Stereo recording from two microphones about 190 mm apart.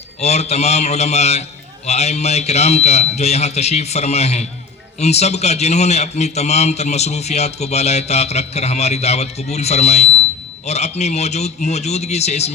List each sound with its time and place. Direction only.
0.2 s a man's voice: 35° left (ahead or behind)